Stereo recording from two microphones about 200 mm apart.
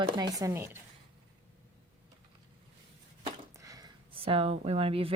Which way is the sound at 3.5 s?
15° right (ahead or behind).